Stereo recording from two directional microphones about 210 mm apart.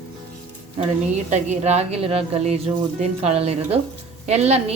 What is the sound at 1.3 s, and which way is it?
A woman's voice, 30° right (ahead or behind).